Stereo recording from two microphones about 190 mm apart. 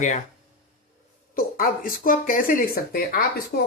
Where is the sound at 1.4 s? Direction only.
50° left (ahead or behind).